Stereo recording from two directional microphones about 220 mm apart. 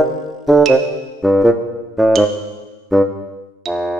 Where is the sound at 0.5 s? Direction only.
Centre (ahead or behind).